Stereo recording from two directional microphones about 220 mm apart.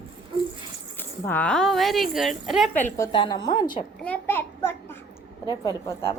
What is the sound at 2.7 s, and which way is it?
A woman's voice, 10° left (ahead or behind).